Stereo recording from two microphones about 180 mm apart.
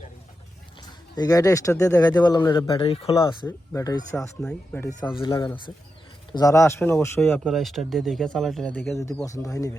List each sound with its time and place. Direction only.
0.8 s speech: 20° left (ahead or behind)
3.4 s speech: 15° left (ahead or behind)
5.2 s speech: 25° left (ahead or behind)
7.2 s speech: 5° left (ahead or behind)